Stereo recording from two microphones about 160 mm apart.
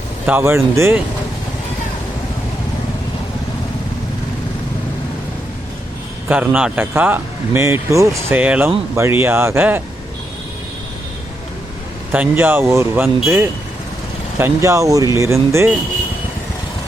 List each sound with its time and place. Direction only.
0.3 s speech: 15° right (ahead or behind)
6.2 s speech: 10° right (ahead or behind)
12.1 s speech: 10° right (ahead or behind)